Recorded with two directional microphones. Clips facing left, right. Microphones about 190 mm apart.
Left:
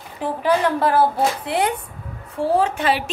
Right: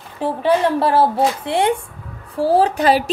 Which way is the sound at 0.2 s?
25° right (ahead or behind).